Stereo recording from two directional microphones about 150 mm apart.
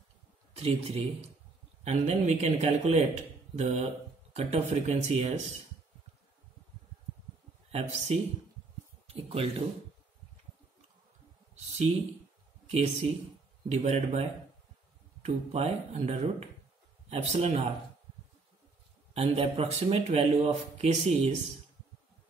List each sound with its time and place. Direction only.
0.6 s speech: 40° right (ahead or behind)
7.7 s speech: 45° right (ahead or behind)
11.5 s a sound: 45° right (ahead or behind)
12.6 s speech: 45° right (ahead or behind)
15.2 s speech: 45° right (ahead or behind)
19.1 s speech: 40° right (ahead or behind)